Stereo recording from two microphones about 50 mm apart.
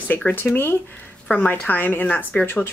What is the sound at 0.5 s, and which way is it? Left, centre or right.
Speech, left.